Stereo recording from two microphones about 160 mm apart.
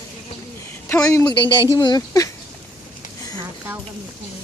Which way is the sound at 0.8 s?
20° left (ahead or behind).